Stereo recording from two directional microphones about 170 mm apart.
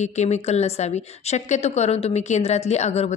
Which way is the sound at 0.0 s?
40° left (ahead or behind).